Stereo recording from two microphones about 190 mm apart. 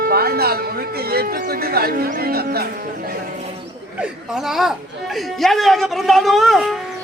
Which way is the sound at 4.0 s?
Centre (ahead or behind).